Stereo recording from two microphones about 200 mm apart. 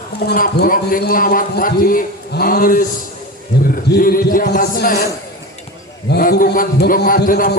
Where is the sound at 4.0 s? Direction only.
45° left (ahead or behind).